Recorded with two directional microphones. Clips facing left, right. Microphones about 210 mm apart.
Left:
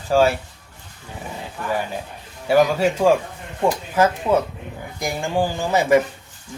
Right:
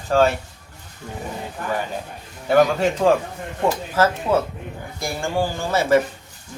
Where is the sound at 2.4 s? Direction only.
10° left (ahead or behind).